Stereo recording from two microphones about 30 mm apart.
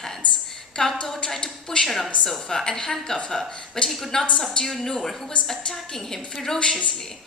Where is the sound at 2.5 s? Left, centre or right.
Centre.